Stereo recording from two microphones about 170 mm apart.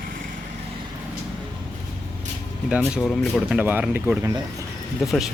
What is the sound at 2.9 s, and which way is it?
Speech, centre (ahead or behind).